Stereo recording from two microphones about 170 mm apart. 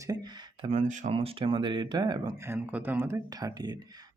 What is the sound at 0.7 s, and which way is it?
Speech, 40° right (ahead or behind).